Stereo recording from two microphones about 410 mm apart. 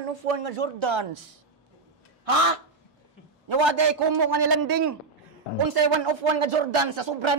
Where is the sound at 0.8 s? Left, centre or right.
Right.